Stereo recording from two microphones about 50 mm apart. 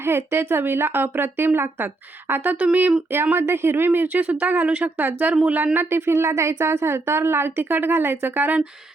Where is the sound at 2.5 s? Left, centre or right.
Right.